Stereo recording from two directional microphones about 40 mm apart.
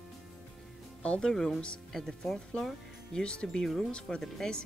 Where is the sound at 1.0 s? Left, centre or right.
Left.